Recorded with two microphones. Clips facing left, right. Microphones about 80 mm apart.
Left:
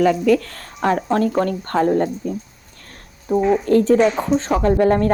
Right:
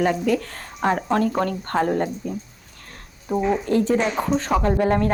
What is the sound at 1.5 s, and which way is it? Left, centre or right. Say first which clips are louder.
Speech: left 4 dB; left.